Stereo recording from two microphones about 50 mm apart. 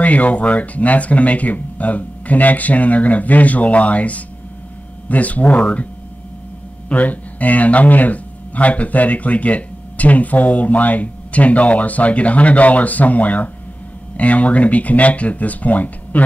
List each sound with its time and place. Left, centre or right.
0.0 s speech: left
6.9 s speech: left